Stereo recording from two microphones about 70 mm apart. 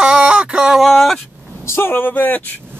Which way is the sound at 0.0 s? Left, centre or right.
Centre.